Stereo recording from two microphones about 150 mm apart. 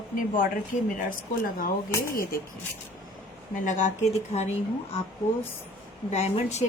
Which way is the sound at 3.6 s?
55° left (ahead or behind).